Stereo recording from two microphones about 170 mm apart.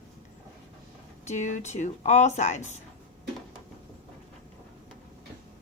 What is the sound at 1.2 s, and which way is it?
Speech, 45° left (ahead or behind).